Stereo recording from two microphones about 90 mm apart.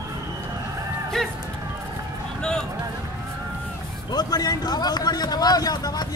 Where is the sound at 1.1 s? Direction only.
5° left (ahead or behind).